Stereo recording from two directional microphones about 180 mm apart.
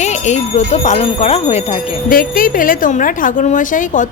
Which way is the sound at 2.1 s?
50° left (ahead or behind).